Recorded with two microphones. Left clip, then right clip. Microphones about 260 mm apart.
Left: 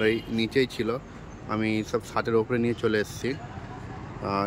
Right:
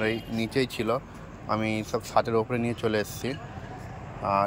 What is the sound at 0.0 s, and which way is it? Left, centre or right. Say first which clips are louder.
Speech: left 3 dB; centre.